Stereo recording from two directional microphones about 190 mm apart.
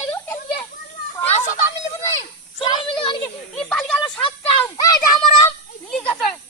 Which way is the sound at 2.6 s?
25° left (ahead or behind).